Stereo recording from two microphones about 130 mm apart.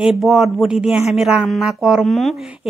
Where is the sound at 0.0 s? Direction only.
Centre (ahead or behind).